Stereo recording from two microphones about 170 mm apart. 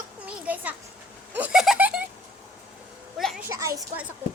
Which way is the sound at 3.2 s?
Centre (ahead or behind).